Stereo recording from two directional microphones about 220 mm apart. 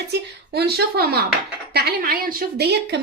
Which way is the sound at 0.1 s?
45° right (ahead or behind).